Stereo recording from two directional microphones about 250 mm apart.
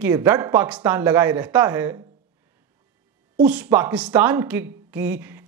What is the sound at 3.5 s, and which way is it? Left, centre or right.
Speech, centre.